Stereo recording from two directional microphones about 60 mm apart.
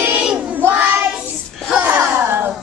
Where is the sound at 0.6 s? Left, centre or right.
Right.